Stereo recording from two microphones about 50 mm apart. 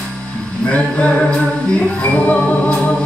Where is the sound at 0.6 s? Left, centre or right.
Left.